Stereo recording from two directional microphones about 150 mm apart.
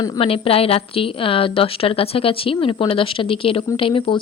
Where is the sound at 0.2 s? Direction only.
40° left (ahead or behind).